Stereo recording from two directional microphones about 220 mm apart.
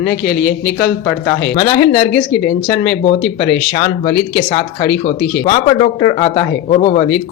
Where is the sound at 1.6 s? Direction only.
25° left (ahead or behind).